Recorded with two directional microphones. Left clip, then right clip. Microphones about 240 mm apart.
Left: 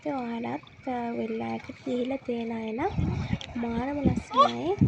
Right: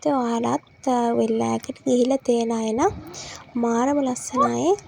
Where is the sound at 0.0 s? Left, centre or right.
Right.